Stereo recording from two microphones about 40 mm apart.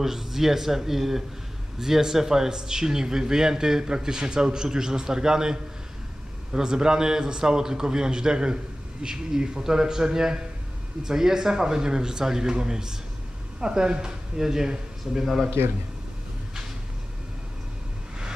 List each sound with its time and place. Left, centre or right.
0.0 s speech: centre